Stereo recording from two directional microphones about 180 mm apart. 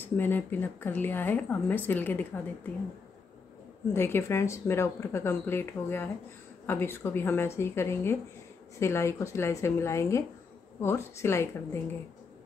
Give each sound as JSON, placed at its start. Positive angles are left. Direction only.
{"t": 0.2, "sound": "a woman's voice", "side_deg": 10}
{"t": 3.9, "sound": "a woman's voice", "side_deg": 15}